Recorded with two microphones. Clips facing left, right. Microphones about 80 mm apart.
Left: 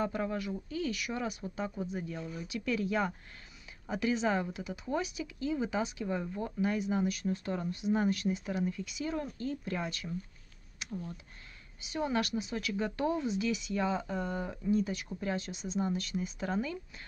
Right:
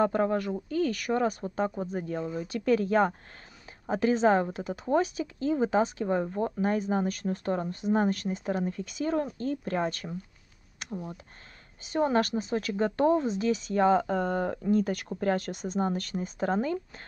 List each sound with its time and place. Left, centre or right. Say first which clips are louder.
0.0 s speech: right 8 dB; right
11.8 s speech: right 7 dB; right